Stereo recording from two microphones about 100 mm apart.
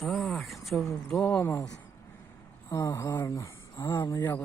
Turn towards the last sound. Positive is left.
turn(degrees=50)  # may be behind; listen again after turning